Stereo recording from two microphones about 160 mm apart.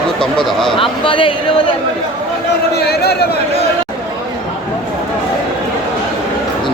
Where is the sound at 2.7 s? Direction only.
90° left.